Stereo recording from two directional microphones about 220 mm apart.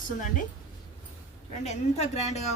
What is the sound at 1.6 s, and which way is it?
Speech, 30° left (ahead or behind).